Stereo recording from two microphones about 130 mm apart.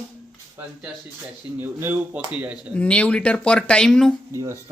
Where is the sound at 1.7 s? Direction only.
15° right (ahead or behind).